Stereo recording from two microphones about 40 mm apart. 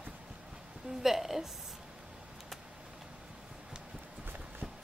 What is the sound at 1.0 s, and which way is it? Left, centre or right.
Speech, centre.